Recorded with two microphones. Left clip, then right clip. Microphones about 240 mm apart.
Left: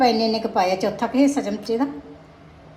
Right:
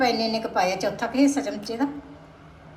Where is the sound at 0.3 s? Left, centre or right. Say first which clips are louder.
Left 4 dB; centre.